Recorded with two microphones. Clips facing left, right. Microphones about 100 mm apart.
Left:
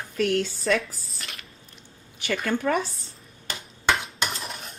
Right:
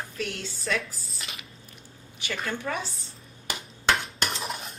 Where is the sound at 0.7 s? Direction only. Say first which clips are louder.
Left 3 dB; centre (ahead or behind).